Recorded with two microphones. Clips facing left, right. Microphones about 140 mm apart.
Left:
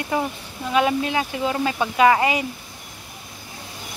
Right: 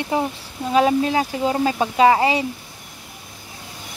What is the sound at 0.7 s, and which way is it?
Speech, 35° right (ahead or behind).